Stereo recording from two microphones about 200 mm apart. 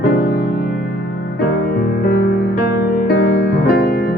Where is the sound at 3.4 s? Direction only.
55° left (ahead or behind).